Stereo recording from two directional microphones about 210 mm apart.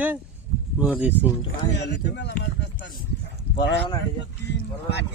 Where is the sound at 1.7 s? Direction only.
55° left (ahead or behind).